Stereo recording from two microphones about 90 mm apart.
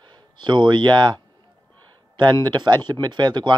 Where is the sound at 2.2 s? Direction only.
55° right (ahead or behind).